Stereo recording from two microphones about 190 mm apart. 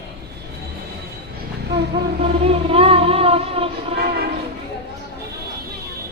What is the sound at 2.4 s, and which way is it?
Music, 30° right (ahead or behind).